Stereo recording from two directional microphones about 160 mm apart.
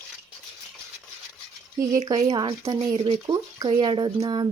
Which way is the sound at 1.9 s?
25° right (ahead or behind).